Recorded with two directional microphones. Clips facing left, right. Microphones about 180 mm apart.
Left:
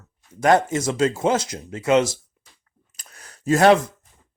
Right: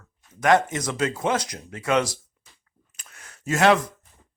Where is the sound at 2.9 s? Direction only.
35° left (ahead or behind).